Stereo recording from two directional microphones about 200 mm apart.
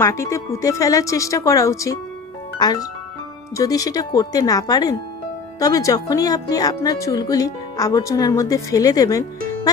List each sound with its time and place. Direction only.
0.0 s speech: 15° left (ahead or behind)